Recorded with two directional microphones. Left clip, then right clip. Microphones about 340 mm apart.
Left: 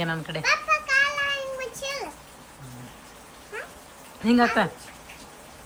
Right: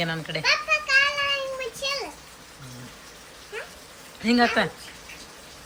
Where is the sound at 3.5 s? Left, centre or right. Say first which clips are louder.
Even; centre.